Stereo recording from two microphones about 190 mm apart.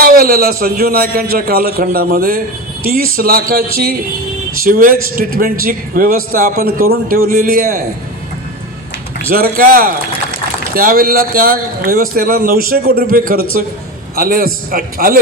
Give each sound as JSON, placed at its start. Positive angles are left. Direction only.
{"t": 0.0, "sound": "a man's voice", "side_deg": -50}
{"t": 4.6, "sound": "a man's voice", "side_deg": -50}
{"t": 9.3, "sound": "a man's voice", "side_deg": -50}